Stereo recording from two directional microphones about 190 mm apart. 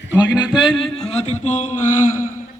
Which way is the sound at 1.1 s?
35° left (ahead or behind).